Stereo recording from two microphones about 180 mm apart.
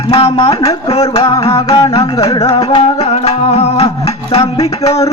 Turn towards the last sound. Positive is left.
turn(degrees=20)  # may be behind; listen again after turning